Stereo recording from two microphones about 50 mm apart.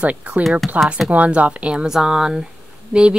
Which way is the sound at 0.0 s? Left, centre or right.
Right.